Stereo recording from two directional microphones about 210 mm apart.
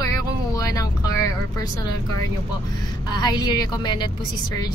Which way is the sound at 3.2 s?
20° left (ahead or behind).